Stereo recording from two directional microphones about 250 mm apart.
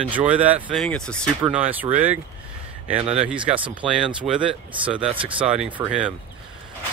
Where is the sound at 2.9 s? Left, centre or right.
Right.